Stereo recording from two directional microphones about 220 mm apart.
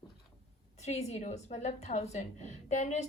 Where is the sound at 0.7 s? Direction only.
30° left (ahead or behind).